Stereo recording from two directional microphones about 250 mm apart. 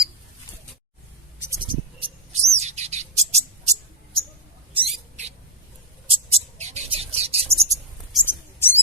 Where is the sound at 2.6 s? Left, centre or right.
Right.